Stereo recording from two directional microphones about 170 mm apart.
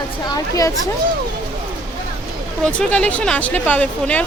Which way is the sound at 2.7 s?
5° left (ahead or behind).